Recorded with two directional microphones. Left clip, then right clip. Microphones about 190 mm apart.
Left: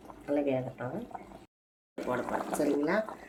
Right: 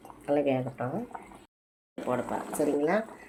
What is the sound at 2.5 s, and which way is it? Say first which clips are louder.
Speech: right 3 dB; 15° right (ahead or behind).